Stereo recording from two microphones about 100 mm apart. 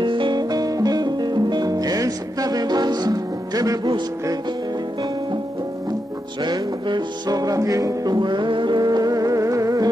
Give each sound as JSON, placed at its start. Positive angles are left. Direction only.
{"t": 0.0, "sound": "music", "side_deg": -55}
{"t": 6.4, "sound": "music", "side_deg": -45}